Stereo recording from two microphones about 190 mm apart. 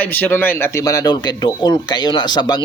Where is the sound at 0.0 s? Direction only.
10° left (ahead or behind).